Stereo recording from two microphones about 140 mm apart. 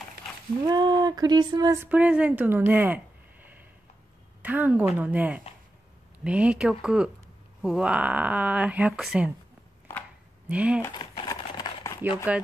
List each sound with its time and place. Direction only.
0.7 s speech: 30° right (ahead or behind)
1.9 s speech: 10° right (ahead or behind)
4.4 s speech: 10° right (ahead or behind)
10.5 s speech: 10° right (ahead or behind)
11.0 s a sound: 30° left (ahead or behind)